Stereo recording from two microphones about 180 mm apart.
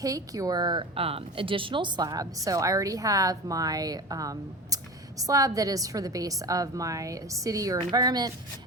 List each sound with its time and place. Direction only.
0.0 s speech: 20° right (ahead or behind)